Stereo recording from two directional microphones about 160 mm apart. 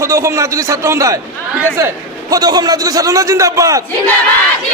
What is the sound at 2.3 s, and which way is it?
A man's voice, 25° right (ahead or behind).